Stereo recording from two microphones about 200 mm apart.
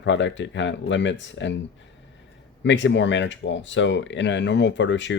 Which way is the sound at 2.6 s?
65° left (ahead or behind).